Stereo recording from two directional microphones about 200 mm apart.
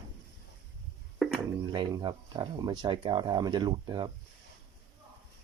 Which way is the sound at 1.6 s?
20° right (ahead or behind).